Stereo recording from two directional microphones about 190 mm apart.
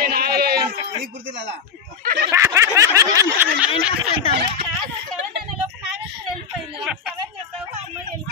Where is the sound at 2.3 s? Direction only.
15° right (ahead or behind).